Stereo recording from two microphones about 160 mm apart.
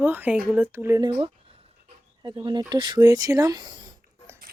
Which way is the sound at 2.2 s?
30° right (ahead or behind).